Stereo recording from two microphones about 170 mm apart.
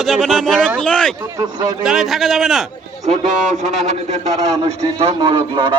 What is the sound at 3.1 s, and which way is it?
A man's voice, 45° right (ahead or behind).